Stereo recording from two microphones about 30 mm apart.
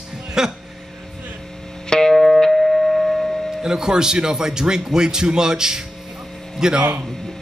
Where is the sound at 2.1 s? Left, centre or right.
Centre.